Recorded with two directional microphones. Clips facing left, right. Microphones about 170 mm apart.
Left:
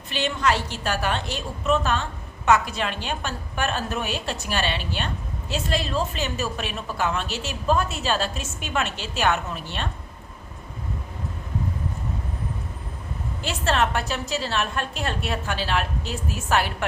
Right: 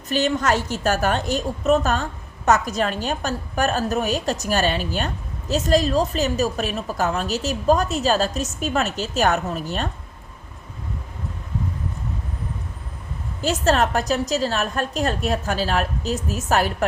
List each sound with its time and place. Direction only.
0.1 s a woman's voice: 45° right (ahead or behind)
13.4 s a woman's voice: 40° right (ahead or behind)